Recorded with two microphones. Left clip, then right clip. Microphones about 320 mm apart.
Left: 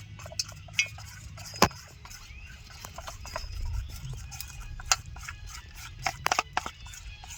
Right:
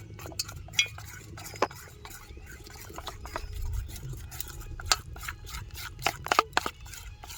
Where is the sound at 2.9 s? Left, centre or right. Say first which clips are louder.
Right 2 dB; centre.